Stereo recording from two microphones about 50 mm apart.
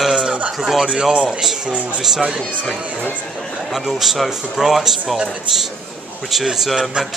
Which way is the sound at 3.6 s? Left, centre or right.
Centre.